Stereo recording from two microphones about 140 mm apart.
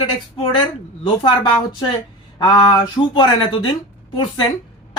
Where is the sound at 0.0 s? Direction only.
40° left (ahead or behind).